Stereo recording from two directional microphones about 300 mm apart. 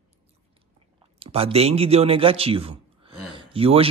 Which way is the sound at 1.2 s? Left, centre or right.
Centre.